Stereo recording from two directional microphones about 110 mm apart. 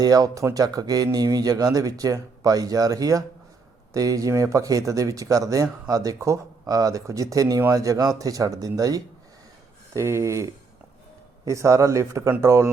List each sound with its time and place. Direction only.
0.0 s speech: 35° right (ahead or behind)